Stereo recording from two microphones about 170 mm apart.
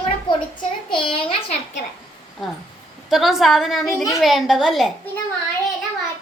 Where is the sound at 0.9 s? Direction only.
30° left (ahead or behind).